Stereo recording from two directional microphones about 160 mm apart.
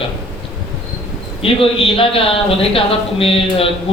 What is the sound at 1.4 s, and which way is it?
A man's voice, 35° left (ahead or behind).